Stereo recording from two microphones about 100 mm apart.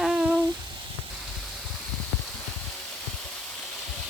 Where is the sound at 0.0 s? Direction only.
5° right (ahead or behind).